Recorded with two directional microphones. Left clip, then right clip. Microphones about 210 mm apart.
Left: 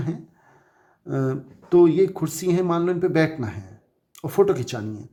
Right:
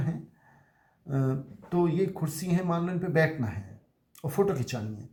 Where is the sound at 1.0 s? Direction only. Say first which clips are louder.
Left 6 dB; 35° left (ahead or behind).